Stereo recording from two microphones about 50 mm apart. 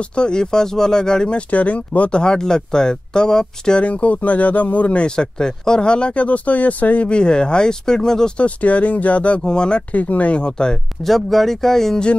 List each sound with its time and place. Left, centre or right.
0.1 s speech: centre
1.5 s speech: left
3.8 s speech: left
8.4 s speech: left
9.4 s speech: centre
11.1 s speech: centre